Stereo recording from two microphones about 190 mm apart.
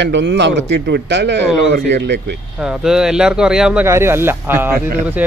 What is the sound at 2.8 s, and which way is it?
Speech, 5° right (ahead or behind).